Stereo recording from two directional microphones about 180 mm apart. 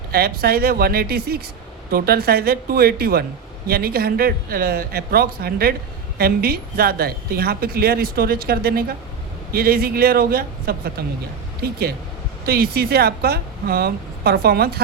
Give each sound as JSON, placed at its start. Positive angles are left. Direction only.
{"t": 0.1, "sound": "a woman's voice", "side_deg": -60}